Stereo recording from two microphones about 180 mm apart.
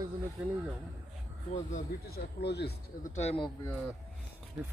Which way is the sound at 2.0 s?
65° left (ahead or behind).